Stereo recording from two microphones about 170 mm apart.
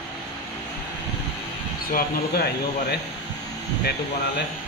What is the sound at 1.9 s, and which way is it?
Speech, 65° left (ahead or behind).